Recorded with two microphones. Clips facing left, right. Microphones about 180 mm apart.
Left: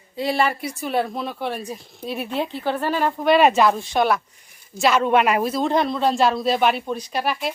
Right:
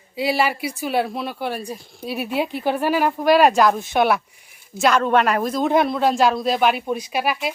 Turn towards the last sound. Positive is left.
turn(degrees=-5)  # may be behind; listen again after turning